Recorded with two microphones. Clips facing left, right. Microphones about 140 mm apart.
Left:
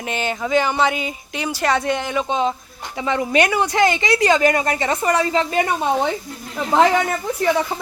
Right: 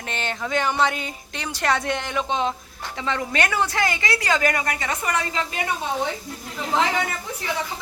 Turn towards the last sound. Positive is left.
turn(degrees=50)  # may be behind; listen again after turning